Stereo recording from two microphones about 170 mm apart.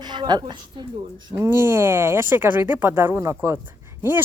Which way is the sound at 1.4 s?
15° right (ahead or behind).